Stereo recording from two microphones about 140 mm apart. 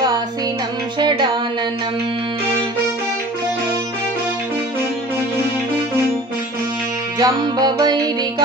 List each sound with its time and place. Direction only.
0.9 s music: 35° right (ahead or behind)
7.2 s music: 30° right (ahead or behind)